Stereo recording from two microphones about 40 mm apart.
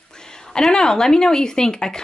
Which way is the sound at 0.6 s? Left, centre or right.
Centre.